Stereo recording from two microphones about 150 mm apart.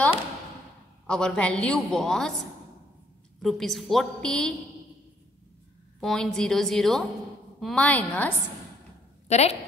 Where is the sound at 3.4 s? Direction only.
Centre (ahead or behind).